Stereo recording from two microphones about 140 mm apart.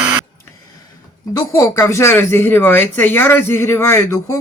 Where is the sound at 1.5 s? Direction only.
20° left (ahead or behind).